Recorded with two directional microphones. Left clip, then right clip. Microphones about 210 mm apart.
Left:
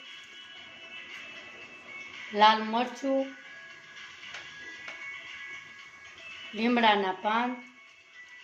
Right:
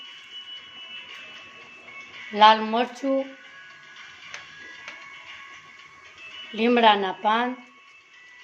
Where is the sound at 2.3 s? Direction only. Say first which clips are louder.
Right 6 dB; 30° right (ahead or behind).